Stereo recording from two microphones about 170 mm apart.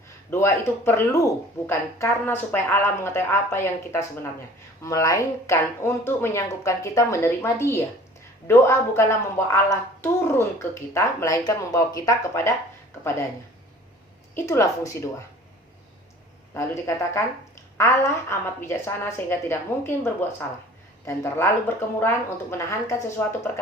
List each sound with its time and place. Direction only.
0.3 s a woman's voice: 15° left (ahead or behind)
14.3 s a woman's voice: 15° left (ahead or behind)
16.6 s a woman's voice: 15° left (ahead or behind)